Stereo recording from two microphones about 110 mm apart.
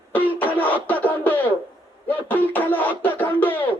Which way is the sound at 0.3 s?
15° left (ahead or behind).